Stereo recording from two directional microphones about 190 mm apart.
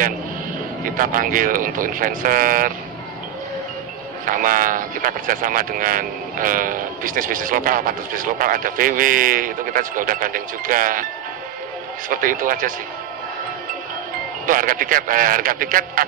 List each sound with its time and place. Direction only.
0.8 s speech: 45° right (ahead or behind)
4.3 s speech: 45° right (ahead or behind)
12.1 s speech: 45° right (ahead or behind)
14.4 s speech: 45° right (ahead or behind)